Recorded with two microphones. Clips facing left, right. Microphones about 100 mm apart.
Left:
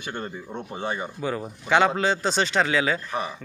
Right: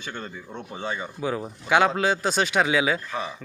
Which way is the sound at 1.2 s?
5° right (ahead or behind).